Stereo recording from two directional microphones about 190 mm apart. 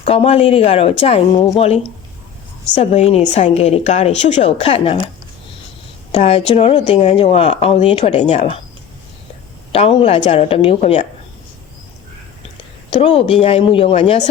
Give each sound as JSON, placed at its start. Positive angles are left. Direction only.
{"t": 0.0, "sound": "speech", "side_deg": 30}
{"t": 6.1, "sound": "speech", "side_deg": 35}
{"t": 9.7, "sound": "speech", "side_deg": 30}
{"t": 12.9, "sound": "speech", "side_deg": 30}